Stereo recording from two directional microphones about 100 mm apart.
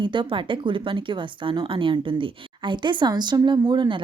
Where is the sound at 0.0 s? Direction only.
55° right (ahead or behind).